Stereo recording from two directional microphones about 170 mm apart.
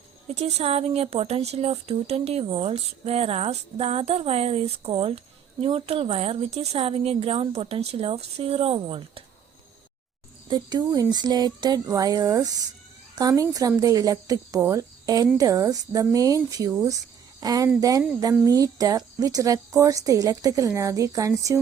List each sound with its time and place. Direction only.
0.3 s speech: 35° right (ahead or behind)
10.5 s speech: 25° right (ahead or behind)